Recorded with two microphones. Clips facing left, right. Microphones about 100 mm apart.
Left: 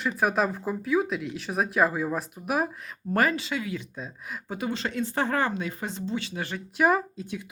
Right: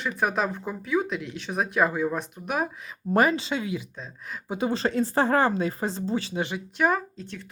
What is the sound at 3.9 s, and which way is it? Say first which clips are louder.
Speech: left 2 dB; 5° left (ahead or behind).